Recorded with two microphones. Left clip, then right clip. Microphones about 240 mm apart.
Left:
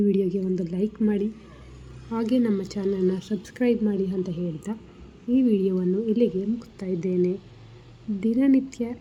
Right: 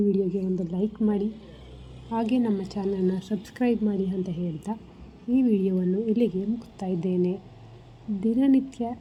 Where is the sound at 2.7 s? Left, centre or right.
Centre.